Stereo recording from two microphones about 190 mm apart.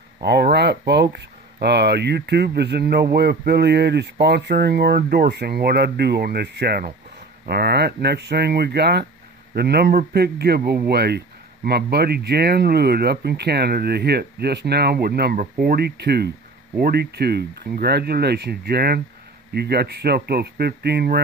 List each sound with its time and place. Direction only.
0.2 s a man's voice: 60° right (ahead or behind)